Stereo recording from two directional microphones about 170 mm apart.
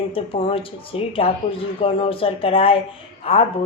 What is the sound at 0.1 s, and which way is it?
Speech, 30° left (ahead or behind).